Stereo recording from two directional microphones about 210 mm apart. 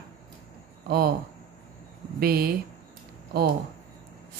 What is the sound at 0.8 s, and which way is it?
Speech, 45° right (ahead or behind).